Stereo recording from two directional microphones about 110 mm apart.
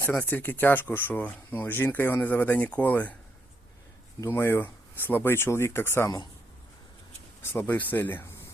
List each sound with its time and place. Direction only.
0.0 s speech: 15° left (ahead or behind)
4.3 s speech: 20° left (ahead or behind)
7.5 s speech: 15° left (ahead or behind)